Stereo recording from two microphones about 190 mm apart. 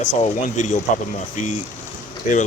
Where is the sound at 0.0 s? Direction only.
40° left (ahead or behind).